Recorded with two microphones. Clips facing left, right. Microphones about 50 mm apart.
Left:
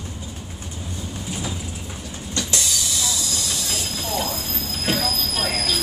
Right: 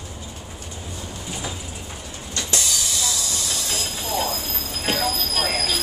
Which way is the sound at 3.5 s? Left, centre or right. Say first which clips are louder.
Even; centre.